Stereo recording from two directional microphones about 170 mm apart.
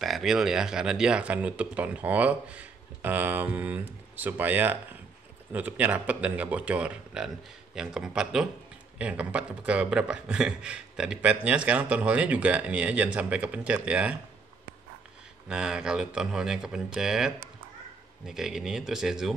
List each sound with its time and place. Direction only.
0.0 s speech: centre (ahead or behind)
15.4 s speech: 5° right (ahead or behind)